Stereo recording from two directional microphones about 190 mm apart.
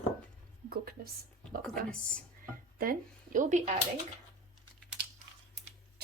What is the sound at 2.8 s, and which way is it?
Speech, 45° right (ahead or behind).